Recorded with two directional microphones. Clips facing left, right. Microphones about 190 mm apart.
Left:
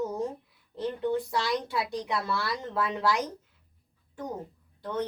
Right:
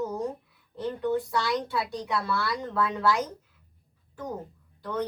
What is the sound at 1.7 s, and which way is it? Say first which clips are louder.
Speech: right 1 dB; 20° left (ahead or behind).